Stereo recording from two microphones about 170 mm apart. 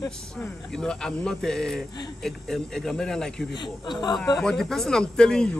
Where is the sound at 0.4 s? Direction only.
5° left (ahead or behind).